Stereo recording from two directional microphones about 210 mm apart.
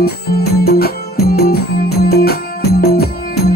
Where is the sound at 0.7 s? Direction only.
45° left (ahead or behind).